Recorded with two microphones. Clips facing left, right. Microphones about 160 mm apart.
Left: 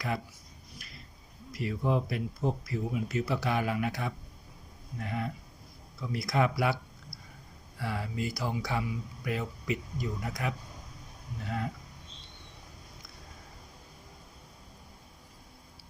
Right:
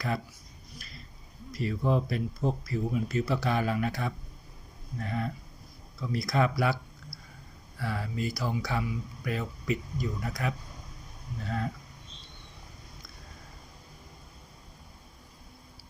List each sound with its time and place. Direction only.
1.5 s speech: 15° left (ahead or behind)
7.8 s speech: 20° left (ahead or behind)